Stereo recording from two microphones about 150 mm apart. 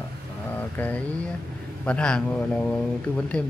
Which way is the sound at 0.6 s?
10° left (ahead or behind).